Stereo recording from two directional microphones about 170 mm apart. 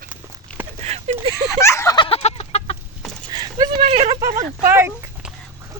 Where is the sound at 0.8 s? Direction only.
40° right (ahead or behind).